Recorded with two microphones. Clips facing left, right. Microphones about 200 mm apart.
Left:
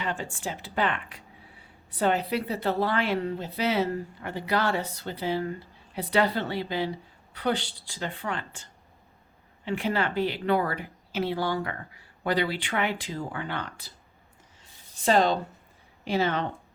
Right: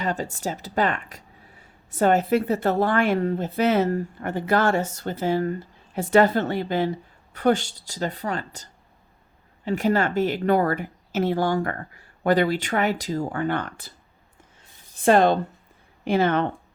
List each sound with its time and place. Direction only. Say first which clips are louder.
0.0 s a woman's voice: right 5 dB; 40° right (ahead or behind)
15.0 s speech: right 5 dB; 55° right (ahead or behind)